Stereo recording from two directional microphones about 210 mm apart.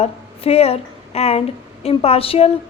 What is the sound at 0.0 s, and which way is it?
A woman's voice, 30° left (ahead or behind).